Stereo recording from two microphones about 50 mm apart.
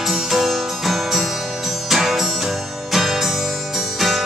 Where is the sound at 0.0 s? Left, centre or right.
Centre.